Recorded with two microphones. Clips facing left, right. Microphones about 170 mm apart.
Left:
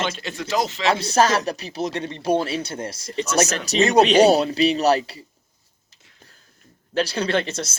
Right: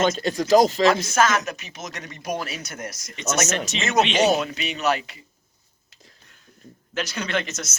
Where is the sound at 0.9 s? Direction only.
35° left (ahead or behind).